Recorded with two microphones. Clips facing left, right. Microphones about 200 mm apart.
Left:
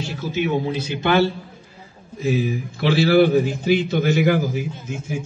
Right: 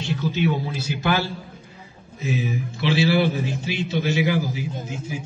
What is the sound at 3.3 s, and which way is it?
A man's voice, 55° left (ahead or behind).